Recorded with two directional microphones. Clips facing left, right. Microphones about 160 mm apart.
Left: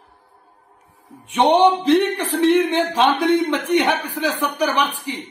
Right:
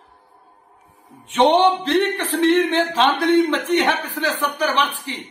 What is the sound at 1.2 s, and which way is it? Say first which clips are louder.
A man's voice: left 1 dB; 10° left (ahead or behind).